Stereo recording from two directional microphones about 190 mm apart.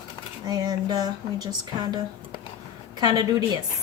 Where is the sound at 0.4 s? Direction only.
20° right (ahead or behind).